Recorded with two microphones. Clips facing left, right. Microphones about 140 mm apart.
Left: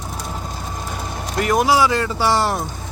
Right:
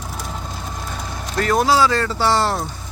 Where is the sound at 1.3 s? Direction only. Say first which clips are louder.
Even; 15° left (ahead or behind).